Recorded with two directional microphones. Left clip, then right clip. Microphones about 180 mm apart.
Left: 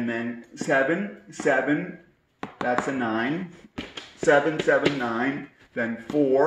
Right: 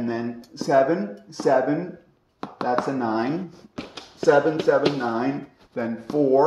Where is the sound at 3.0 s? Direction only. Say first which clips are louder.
Right 2 dB; 25° right (ahead or behind).